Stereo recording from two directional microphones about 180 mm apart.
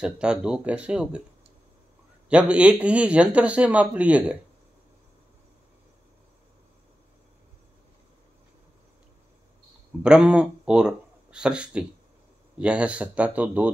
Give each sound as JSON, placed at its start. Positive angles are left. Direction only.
{"t": 0.0, "sound": "speech", "side_deg": -5}
{"t": 2.2, "sound": "speech", "side_deg": -5}
{"t": 10.0, "sound": "speech", "side_deg": -5}